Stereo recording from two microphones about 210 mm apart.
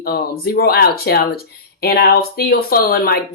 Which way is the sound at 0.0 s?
45° left (ahead or behind).